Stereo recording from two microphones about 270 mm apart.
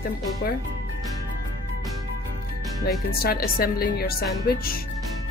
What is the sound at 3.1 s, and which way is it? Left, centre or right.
Speech, left.